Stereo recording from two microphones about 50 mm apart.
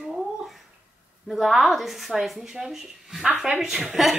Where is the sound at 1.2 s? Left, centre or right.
Centre.